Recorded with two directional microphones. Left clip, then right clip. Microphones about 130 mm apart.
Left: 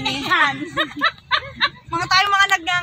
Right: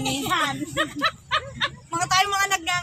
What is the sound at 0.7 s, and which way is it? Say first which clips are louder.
Snicker: left 3 dB; 25° left (ahead or behind).